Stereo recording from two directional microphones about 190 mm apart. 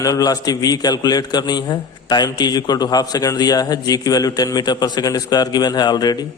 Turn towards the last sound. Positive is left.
turn(degrees=20)  # may be behind; listen again after turning